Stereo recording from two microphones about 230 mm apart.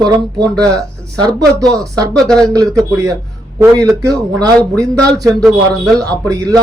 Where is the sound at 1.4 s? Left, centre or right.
Centre.